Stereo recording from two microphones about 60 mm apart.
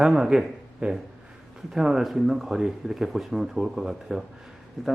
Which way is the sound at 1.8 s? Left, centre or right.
Centre.